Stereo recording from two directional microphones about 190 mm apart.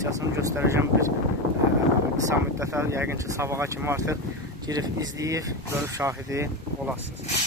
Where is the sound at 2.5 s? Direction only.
15° right (ahead or behind).